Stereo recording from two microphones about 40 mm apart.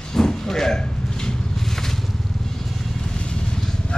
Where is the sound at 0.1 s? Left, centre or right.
Centre.